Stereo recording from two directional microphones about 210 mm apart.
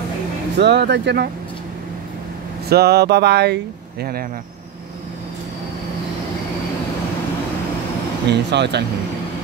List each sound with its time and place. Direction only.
0.6 s speech: 55° right (ahead or behind)
2.7 s speech: 50° right (ahead or behind)
8.3 s speech: 55° right (ahead or behind)